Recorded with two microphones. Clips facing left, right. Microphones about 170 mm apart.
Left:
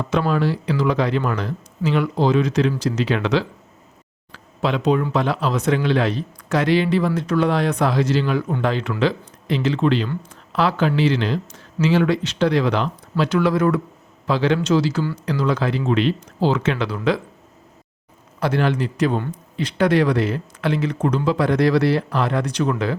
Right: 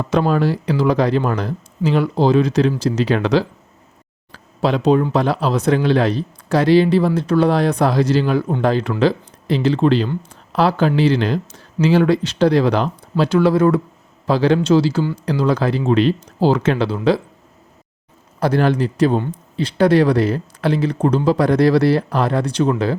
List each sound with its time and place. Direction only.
0.1 s speech: 40° right (ahead or behind)
18.3 s speech: 40° right (ahead or behind)